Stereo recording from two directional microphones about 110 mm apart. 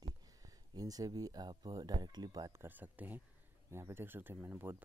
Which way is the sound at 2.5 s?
20° right (ahead or behind).